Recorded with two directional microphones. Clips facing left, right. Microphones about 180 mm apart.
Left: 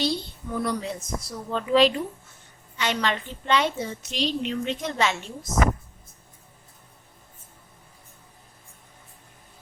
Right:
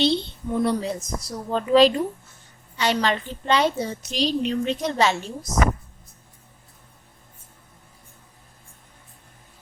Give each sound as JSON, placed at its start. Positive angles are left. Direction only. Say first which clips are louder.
{"t": 0.0, "sound": "a woman's voice", "louder": "right 5 dB", "side_deg": -25}